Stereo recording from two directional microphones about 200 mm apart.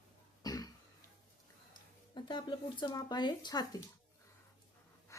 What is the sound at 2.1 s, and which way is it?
A woman's voice, 25° left (ahead or behind).